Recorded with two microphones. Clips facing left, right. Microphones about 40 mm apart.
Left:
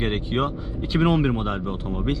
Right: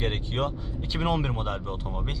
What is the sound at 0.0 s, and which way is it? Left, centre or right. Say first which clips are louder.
Speech: left 5 dB; centre.